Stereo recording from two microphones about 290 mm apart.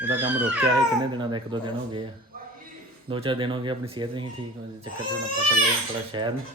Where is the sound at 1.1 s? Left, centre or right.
Centre.